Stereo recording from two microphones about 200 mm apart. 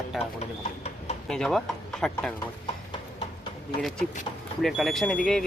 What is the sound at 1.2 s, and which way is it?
A man's voice, 5° left (ahead or behind).